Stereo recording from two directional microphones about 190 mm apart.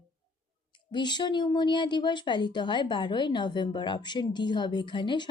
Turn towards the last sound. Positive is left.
turn(degrees=25)  # may be behind; listen again after turning